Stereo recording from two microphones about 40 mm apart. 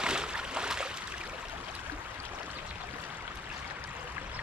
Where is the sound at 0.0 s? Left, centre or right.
Right.